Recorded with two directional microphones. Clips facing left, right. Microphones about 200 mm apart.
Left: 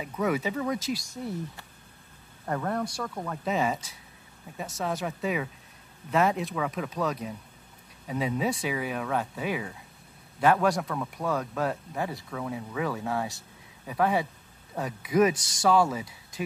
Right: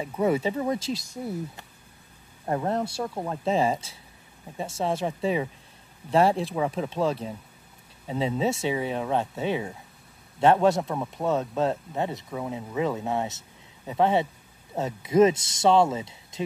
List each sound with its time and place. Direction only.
0.0 s speech: 30° right (ahead or behind)